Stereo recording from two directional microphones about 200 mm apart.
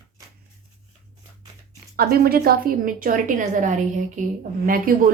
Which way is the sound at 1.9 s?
50° right (ahead or behind).